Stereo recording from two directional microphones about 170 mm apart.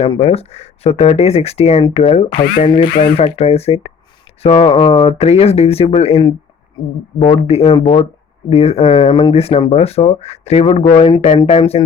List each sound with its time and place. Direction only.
0.0 s speech: 35° left (ahead or behind)